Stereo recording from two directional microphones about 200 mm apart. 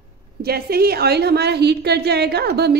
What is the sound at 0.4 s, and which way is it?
A woman's voice, 50° right (ahead or behind).